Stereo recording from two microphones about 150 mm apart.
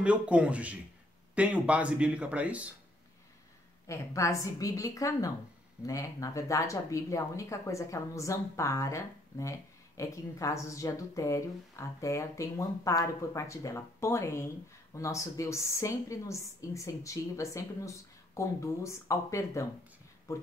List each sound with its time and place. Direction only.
0.0 s speech: 10° right (ahead or behind)
3.8 s speech: 20° left (ahead or behind)